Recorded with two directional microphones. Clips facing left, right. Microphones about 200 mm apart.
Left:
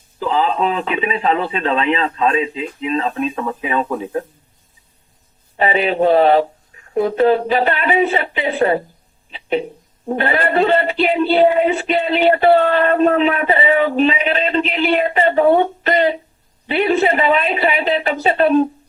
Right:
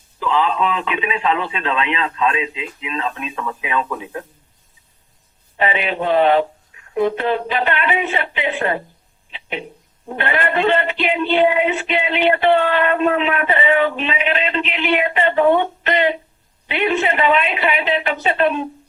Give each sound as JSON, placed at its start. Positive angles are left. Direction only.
{"t": 0.2, "sound": "speech", "side_deg": 40}
{"t": 5.5, "sound": "speech", "side_deg": 40}
{"t": 9.3, "sound": "a sound", "side_deg": 40}
{"t": 10.1, "sound": "speech", "side_deg": 40}